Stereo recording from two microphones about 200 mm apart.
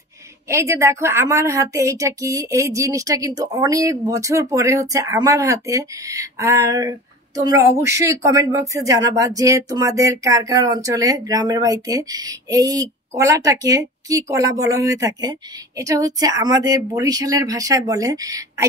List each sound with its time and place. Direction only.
0.5 s speech: 15° right (ahead or behind)